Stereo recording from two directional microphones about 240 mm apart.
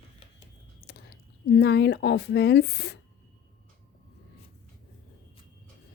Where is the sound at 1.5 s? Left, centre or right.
Left.